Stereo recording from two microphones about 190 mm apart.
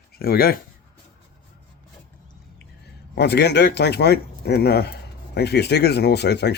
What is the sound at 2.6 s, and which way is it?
Speech, 60° left (ahead or behind).